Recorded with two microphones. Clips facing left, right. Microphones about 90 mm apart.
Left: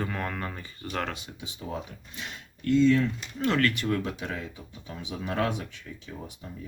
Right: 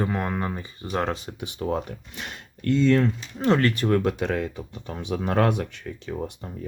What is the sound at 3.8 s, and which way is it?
Speech, 50° right (ahead or behind).